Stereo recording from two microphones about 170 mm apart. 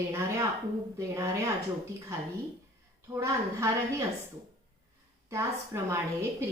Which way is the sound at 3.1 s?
15° right (ahead or behind).